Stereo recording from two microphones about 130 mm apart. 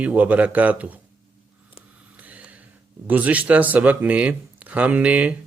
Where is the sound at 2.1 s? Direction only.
10° right (ahead or behind).